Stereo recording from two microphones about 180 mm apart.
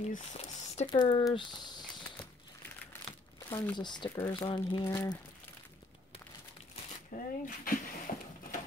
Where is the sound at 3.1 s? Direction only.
25° left (ahead or behind).